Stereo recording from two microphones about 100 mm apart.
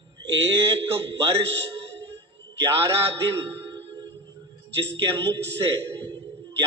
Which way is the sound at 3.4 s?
25° right (ahead or behind).